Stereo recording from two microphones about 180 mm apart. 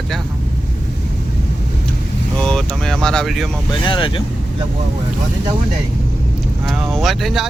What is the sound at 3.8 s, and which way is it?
Speech, 30° left (ahead or behind).